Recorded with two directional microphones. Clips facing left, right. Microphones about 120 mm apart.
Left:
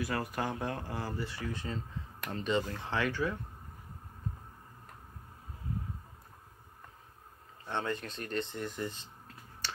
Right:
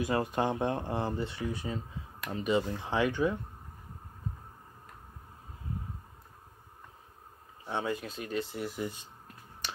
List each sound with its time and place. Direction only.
0.0 s speech: 25° right (ahead or behind)
7.6 s speech: 10° right (ahead or behind)